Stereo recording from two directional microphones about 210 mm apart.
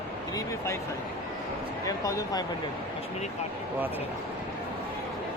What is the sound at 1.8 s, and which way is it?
Speech, 15° left (ahead or behind).